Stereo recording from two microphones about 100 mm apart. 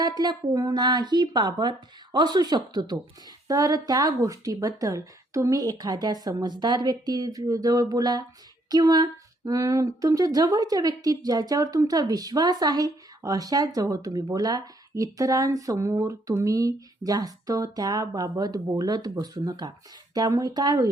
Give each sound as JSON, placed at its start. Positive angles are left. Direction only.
{"t": 0.0, "sound": "speech", "side_deg": -45}